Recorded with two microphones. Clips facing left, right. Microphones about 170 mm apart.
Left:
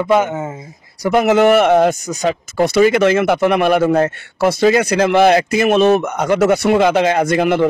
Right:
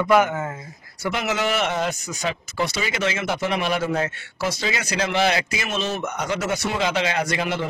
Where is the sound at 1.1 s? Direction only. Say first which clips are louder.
Left 13 dB; 55° left (ahead or behind).